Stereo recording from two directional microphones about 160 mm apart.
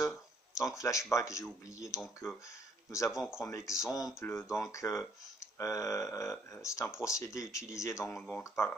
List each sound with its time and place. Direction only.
0.0 s a sound: 20° left (ahead or behind)
0.8 s speech: 20° left (ahead or behind)
3.1 s speech: 5° right (ahead or behind)
3.4 s speech: 20° left (ahead or behind)